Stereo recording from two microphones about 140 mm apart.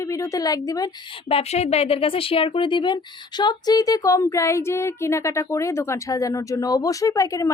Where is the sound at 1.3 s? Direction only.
45° left (ahead or behind).